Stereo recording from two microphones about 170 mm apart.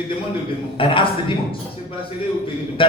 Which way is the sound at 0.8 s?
30° left (ahead or behind).